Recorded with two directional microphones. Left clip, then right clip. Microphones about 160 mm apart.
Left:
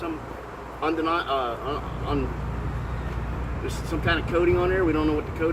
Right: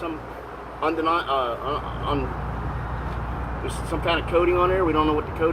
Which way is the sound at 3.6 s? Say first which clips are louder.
Right 1 dB; 35° left (ahead or behind).